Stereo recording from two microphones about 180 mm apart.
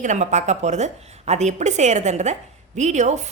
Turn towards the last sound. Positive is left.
turn(degrees=-40)  # may be behind; listen again after turning